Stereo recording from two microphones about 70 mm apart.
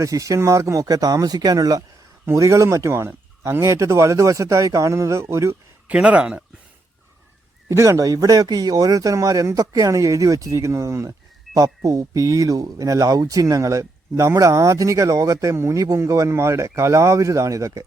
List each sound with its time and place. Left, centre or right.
0.0 s speech: right
2.3 s speech: right
5.9 s speech: centre
7.7 s speech: right
11.9 s speech: right